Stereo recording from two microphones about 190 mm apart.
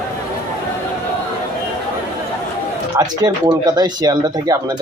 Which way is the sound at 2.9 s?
20° right (ahead or behind).